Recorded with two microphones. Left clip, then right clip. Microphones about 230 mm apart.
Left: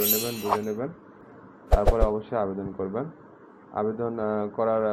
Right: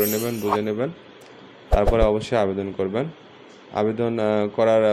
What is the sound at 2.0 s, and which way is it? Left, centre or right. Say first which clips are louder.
Speech: right 6 dB; right.